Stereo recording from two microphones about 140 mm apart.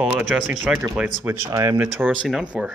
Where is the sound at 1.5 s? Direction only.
25° right (ahead or behind).